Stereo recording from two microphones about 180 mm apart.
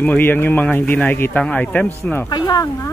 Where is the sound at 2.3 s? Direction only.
20° left (ahead or behind).